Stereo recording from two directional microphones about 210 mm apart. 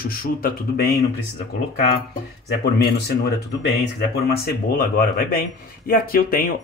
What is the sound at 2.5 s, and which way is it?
Speech, 50° left (ahead or behind).